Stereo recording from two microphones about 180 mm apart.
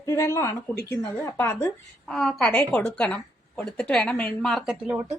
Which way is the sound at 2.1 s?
Centre (ahead or behind).